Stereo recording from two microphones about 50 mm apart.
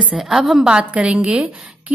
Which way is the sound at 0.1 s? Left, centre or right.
Centre.